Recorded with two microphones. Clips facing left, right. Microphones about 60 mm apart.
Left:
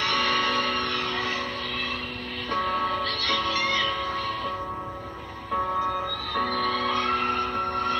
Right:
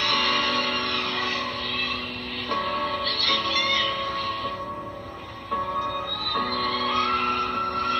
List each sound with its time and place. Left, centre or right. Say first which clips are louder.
0.0 s music: even; left
2.5 s music: left 1 dB; left
6.3 s music: even; centre